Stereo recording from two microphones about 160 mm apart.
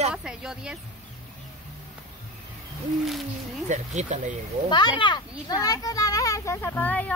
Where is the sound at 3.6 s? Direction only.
45° right (ahead or behind).